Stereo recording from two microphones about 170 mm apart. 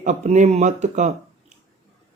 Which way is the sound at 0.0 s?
45° right (ahead or behind).